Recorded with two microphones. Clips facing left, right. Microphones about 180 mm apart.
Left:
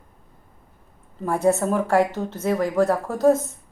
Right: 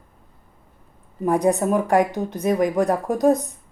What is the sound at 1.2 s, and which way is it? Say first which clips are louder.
A woman's voice: right 1 dB; 15° right (ahead or behind).